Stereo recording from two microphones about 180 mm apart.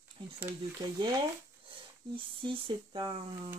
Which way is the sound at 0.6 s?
25° right (ahead or behind).